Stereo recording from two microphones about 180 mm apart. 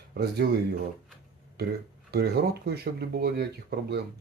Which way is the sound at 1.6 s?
60° right (ahead or behind).